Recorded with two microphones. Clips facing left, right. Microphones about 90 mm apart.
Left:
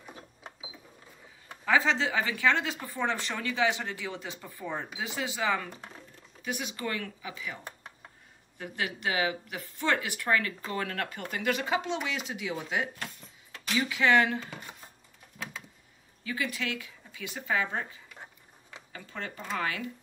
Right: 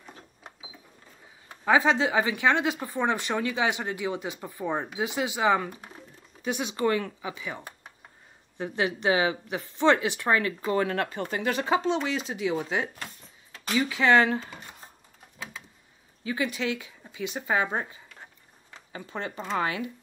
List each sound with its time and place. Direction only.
1.6 s speech: 20° right (ahead or behind)
5.7 s speech: 10° right (ahead or behind)
6.4 s speech: 25° right (ahead or behind)
16.3 s speech: 20° right (ahead or behind)
18.9 s speech: 25° right (ahead or behind)